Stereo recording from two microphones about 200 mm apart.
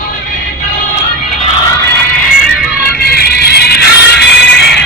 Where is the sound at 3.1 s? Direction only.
50° left (ahead or behind).